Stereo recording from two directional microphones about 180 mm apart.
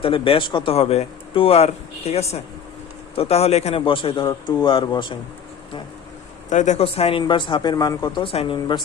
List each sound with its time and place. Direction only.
0.0 s a man's voice: 30° left (ahead or behind)
6.5 s speech: 40° left (ahead or behind); by 8.8 s 25° left (ahead or behind)